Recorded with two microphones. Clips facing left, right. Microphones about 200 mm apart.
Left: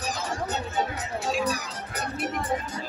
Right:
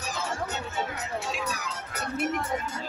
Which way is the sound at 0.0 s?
35° left (ahead or behind).